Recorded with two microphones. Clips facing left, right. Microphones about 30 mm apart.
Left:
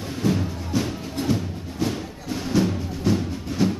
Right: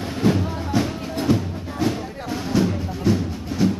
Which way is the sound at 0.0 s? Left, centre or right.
Right.